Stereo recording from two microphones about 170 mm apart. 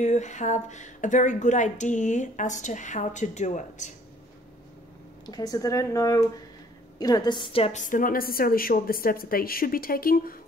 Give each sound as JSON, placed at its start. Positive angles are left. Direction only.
{"t": 0.0, "sound": "a woman's voice", "side_deg": 45}
{"t": 5.2, "sound": "a woman's voice", "side_deg": 25}